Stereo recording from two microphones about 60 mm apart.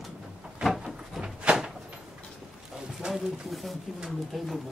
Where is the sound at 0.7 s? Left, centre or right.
Centre.